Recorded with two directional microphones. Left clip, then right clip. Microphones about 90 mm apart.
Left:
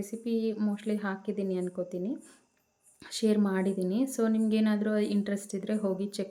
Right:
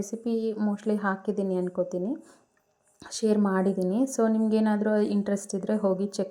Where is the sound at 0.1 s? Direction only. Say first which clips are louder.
Right 2 dB; 30° right (ahead or behind).